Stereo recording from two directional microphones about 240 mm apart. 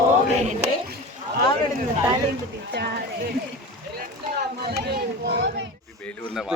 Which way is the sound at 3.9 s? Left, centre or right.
Right.